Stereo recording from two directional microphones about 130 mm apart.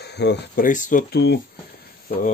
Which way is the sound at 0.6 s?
85° left.